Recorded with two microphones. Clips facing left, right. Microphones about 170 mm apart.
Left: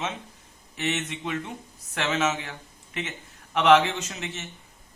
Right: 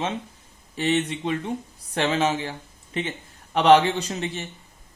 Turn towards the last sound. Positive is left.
turn(degrees=-35)  # may be behind; listen again after turning